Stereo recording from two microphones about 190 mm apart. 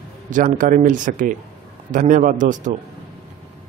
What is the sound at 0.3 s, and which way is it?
Speech, 45° right (ahead or behind).